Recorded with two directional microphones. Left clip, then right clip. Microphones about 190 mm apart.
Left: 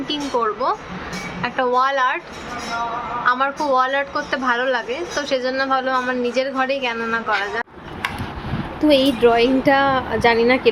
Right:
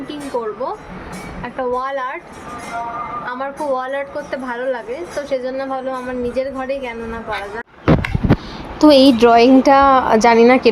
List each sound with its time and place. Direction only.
0.3 s speech: 20° left (ahead or behind)
1.4 s a woman's voice: 5° right (ahead or behind)
3.2 s a woman's voice: 5° right (ahead or behind)
8.9 s speech: 35° right (ahead or behind)